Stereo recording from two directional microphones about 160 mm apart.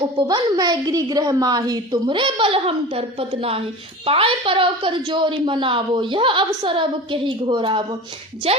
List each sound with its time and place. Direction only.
0.3 s a woman's voice: 25° right (ahead or behind)